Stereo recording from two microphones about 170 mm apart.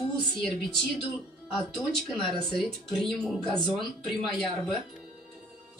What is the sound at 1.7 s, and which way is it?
Speech, 5° left (ahead or behind).